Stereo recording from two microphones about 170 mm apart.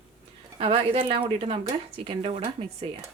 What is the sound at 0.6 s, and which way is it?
A woman's voice, 30° right (ahead or behind).